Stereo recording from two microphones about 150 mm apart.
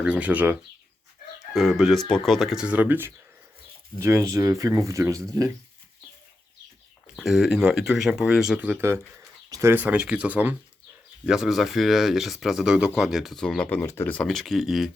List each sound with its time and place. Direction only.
0.0 s speech: 10° right (ahead or behind)
1.5 s speech: centre (ahead or behind); by 5.2 s 20° right (ahead or behind)
7.2 s speech: centre (ahead or behind)